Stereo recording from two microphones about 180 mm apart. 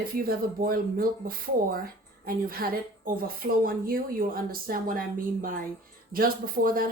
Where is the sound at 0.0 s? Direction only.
55° right (ahead or behind).